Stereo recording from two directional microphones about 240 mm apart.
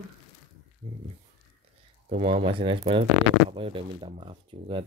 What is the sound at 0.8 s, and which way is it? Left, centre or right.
Speech, centre.